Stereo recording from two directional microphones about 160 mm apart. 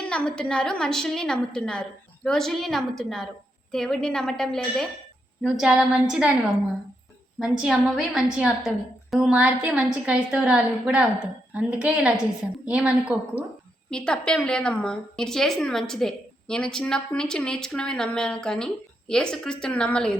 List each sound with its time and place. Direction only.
0.1 s a woman's voice: 5° left (ahead or behind)
7.3 s a woman's voice: 5° right (ahead or behind)
13.9 s a woman's voice: 5° left (ahead or behind)